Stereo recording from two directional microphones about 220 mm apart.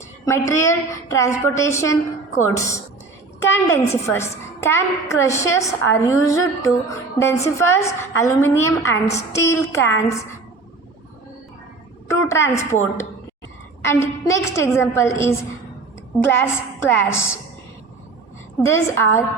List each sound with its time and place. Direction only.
0.3 s a woman's voice: 15° left (ahead or behind)
12.0 s a woman's voice: 15° left (ahead or behind)
18.6 s a woman's voice: 10° left (ahead or behind)